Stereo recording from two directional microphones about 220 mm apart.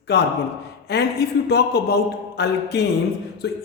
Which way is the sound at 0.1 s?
45° left (ahead or behind).